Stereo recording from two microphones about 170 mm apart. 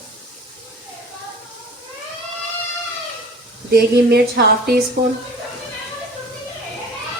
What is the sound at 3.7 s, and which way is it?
Speech, 70° right (ahead or behind).